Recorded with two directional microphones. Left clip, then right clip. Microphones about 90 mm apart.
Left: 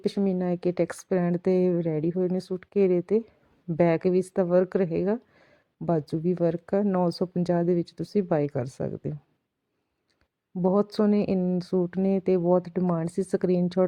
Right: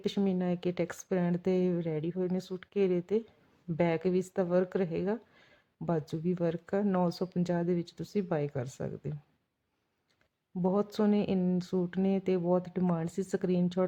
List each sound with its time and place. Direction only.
0.3 s a woman's voice: 30° left (ahead or behind)
10.6 s a woman's voice: 30° left (ahead or behind)